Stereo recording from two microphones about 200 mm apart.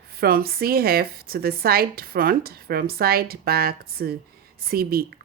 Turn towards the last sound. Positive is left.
turn(degrees=-50)  # may be behind; listen again after turning